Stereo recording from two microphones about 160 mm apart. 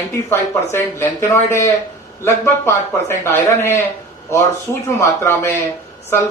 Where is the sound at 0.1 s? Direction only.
15° left (ahead or behind).